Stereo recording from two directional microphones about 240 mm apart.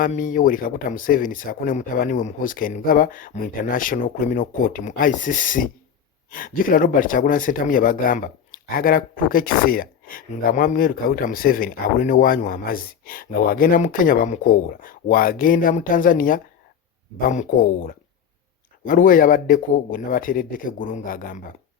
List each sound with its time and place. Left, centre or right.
0.0 s speech: left
18.9 s speech: left